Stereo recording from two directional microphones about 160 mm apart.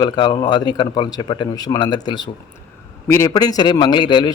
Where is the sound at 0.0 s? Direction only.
25° left (ahead or behind).